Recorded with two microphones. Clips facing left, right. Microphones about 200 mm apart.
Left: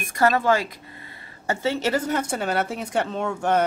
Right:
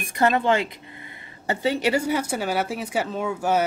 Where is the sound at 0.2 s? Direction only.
20° right (ahead or behind).